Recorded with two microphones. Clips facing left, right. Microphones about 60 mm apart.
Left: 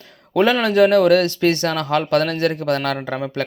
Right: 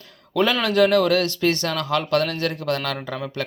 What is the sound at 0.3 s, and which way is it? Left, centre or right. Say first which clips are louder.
Speech: left 4 dB; left.